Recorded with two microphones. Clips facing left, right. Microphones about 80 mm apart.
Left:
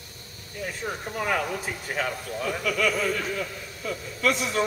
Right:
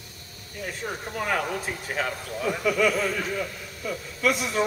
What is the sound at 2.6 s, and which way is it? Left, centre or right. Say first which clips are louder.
A man's voice: right 2 dB; centre.